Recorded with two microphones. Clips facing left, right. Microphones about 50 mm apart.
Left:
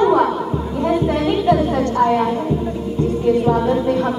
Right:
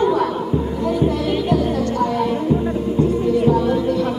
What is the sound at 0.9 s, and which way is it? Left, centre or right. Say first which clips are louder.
Music: left 2 dB; left.